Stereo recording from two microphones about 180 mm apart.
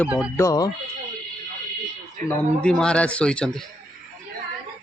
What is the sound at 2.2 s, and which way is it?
A man's voice, 5° left (ahead or behind).